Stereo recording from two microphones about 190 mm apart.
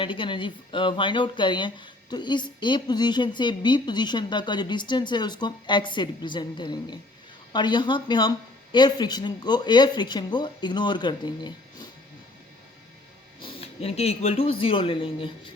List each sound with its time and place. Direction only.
0.0 s speech: 25° left (ahead or behind)
13.4 s a man's voice: 30° left (ahead or behind)